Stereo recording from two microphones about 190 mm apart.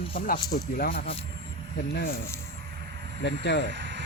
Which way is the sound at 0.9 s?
30° left (ahead or behind).